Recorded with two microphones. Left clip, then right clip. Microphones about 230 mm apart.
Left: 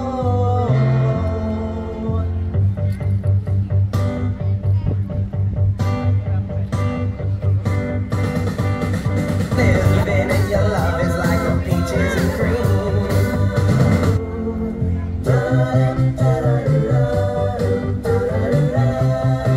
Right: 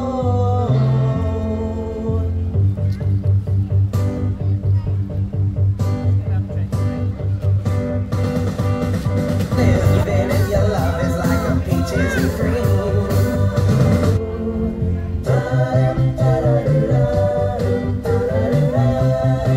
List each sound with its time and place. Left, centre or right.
0.0 s music: left
7.6 s music: left
15.2 s music: left